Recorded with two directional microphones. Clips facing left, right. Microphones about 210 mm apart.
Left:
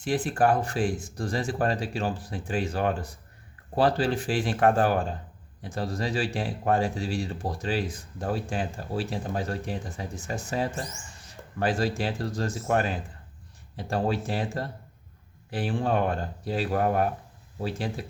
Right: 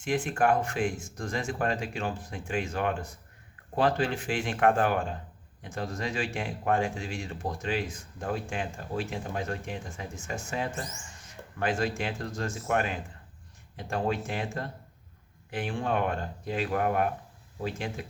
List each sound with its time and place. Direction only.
0.0 s speech: 35° left (ahead or behind)